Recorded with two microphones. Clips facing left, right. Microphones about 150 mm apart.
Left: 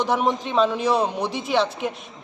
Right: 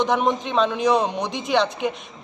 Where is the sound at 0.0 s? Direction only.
5° left (ahead or behind).